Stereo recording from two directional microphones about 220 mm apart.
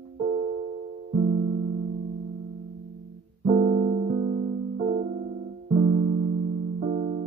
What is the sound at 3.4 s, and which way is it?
Piano, 25° right (ahead or behind).